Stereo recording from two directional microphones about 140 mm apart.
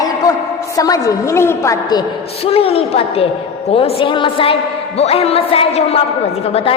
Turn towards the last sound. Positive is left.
turn(degrees=45)  # may be behind; listen again after turning